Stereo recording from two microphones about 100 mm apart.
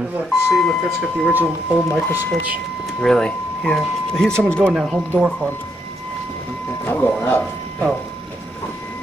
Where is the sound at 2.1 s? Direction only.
20° left (ahead or behind).